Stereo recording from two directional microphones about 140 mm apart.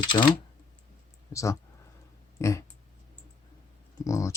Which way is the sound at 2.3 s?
20° left (ahead or behind).